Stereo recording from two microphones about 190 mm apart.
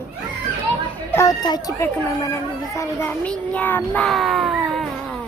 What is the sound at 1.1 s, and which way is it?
A child's voice, 15° left (ahead or behind).